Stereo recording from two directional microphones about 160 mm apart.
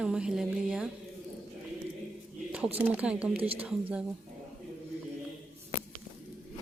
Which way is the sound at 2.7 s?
10° right (ahead or behind).